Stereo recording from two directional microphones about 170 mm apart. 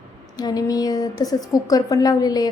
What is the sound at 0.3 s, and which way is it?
A woman's voice, 25° left (ahead or behind).